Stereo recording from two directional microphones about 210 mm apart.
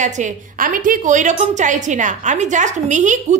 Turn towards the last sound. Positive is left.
turn(degrees=-35)  # may be behind; listen again after turning